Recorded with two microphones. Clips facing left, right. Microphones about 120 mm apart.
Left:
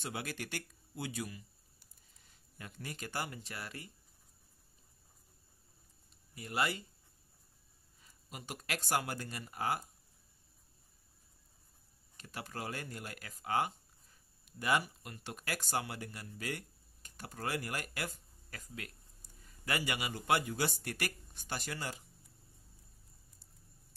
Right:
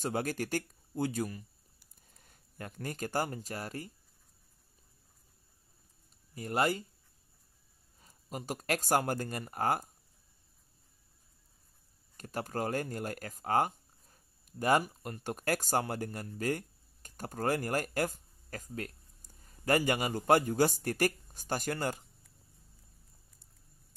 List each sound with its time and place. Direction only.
0.0 s speech: 45° right (ahead or behind)
6.3 s speech: 40° right (ahead or behind)
8.0 s speech: 40° right (ahead or behind)
12.2 s speech: 45° right (ahead or behind)